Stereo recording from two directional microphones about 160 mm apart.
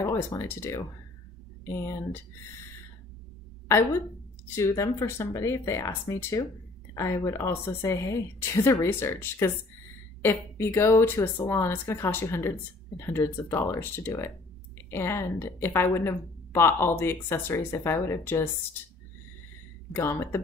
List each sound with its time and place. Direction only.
0.0 s a woman's voice: 20° left (ahead or behind)
4.6 s a woman's voice: 20° left (ahead or behind)
19.9 s a woman's voice: 15° left (ahead or behind)